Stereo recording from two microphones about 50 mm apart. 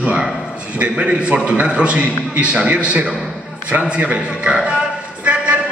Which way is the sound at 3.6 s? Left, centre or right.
Right.